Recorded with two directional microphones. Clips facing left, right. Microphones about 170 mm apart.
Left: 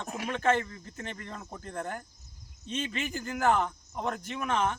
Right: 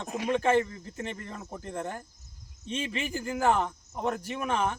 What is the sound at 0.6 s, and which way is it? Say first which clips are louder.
Speech: right 5 dB; 20° right (ahead or behind).